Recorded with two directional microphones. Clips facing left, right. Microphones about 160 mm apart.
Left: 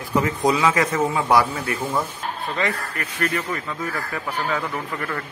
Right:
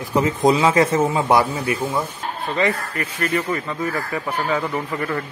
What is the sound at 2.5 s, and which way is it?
Speech, centre (ahead or behind).